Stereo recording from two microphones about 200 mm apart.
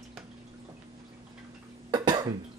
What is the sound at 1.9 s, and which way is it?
Cough, 20° right (ahead or behind).